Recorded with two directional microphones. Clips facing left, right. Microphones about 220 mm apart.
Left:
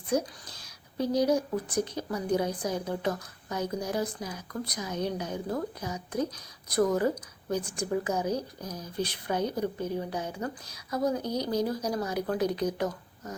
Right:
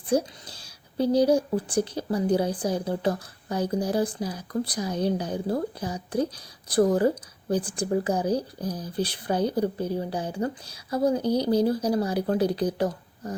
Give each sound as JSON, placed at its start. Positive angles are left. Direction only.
{"t": 0.1, "sound": "speech", "side_deg": -30}